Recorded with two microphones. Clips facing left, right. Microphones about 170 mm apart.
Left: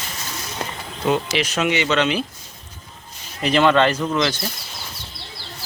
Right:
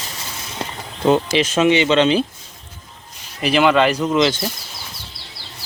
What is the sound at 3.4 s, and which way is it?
Speech, 5° right (ahead or behind).